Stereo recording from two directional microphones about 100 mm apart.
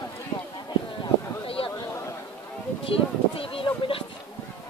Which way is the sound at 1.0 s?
65° left (ahead or behind).